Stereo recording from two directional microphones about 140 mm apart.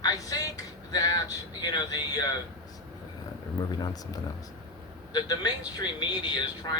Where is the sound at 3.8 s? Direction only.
25° left (ahead or behind).